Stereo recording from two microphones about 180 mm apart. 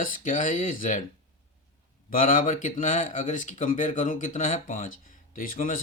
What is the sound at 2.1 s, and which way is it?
Speech, 50° left (ahead or behind).